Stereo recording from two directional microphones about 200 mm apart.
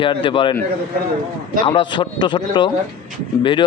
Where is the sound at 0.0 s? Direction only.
25° left (ahead or behind).